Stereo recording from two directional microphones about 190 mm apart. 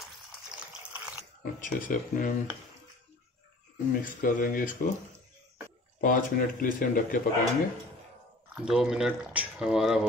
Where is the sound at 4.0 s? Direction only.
45° left (ahead or behind).